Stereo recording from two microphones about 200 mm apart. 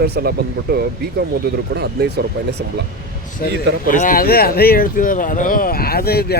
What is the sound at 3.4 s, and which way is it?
Speech, 40° left (ahead or behind).